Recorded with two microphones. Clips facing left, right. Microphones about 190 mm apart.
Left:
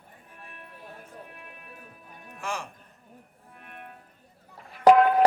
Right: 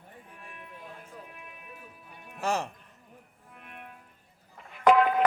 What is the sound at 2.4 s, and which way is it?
Music, 40° right (ahead or behind).